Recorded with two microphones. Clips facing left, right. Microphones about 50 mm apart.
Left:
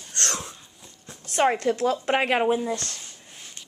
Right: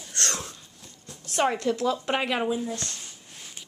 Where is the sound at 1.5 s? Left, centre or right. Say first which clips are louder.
Left 2 dB; left.